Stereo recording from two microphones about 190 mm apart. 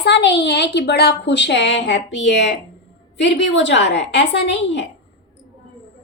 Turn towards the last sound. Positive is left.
turn(degrees=70)  # may be behind; listen again after turning